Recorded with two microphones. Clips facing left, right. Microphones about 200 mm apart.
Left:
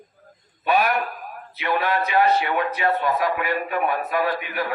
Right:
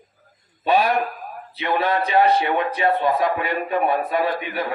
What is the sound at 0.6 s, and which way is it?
A man's voice, 30° right (ahead or behind).